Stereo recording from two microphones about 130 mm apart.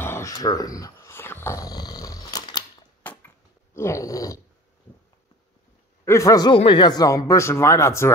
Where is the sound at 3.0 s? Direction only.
20° left (ahead or behind).